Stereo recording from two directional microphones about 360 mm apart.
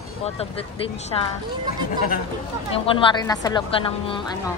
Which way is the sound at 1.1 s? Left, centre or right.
Centre.